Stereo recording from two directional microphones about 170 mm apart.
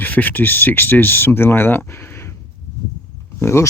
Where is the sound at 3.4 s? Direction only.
15° left (ahead or behind).